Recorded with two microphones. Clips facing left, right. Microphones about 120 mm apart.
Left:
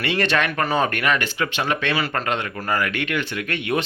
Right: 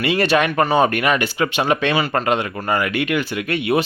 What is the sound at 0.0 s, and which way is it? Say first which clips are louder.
Speech: right 5 dB; 10° right (ahead or behind).